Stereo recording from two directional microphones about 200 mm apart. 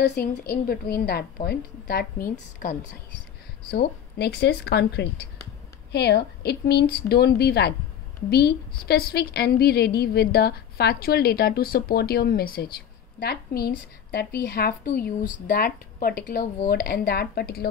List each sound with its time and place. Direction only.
0.0 s a woman's voice: 55° left (ahead or behind)
4.4 s a woman's voice: 55° left (ahead or behind)